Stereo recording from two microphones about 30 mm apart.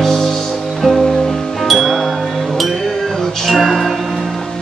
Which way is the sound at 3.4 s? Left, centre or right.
Centre.